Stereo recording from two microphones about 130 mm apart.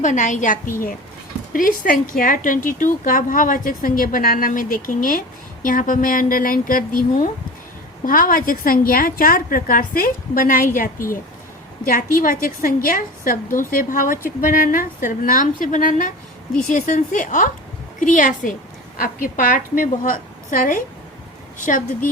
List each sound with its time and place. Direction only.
0.0 s a woman's voice: 75° left (ahead or behind)
18.0 s speech: 90° left